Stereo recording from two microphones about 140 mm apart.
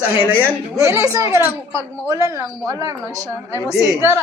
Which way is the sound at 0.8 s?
20° right (ahead or behind).